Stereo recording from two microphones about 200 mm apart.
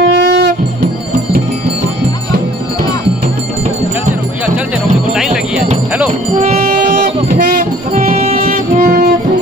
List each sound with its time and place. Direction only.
0.0 s music: 65° right (ahead or behind)
6.3 s music: 40° right (ahead or behind)
8.8 s music: 50° right (ahead or behind)